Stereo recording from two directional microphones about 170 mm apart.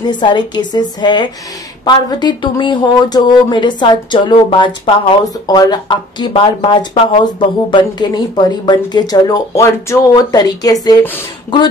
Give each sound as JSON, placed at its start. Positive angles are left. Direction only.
{"t": 0.1, "sound": "speech", "side_deg": 25}